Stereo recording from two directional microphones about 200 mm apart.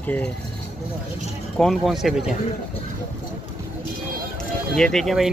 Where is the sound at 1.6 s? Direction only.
Centre (ahead or behind).